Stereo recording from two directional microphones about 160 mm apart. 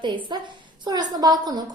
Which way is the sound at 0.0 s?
30° right (ahead or behind).